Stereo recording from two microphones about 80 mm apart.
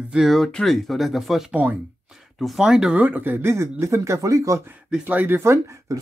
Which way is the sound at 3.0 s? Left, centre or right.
Right.